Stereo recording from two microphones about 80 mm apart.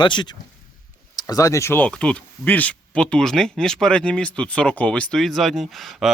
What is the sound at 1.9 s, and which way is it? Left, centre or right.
Speech, centre.